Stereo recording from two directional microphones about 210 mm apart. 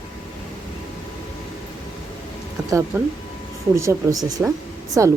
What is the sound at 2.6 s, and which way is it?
Speech, 15° right (ahead or behind).